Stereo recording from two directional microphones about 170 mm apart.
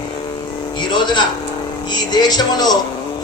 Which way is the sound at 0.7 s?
25° left (ahead or behind).